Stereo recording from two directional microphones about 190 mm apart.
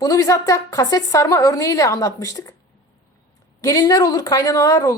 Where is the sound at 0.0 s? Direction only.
15° left (ahead or behind).